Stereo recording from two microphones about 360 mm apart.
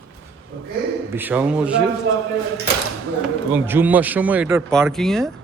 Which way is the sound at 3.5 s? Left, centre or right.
Centre.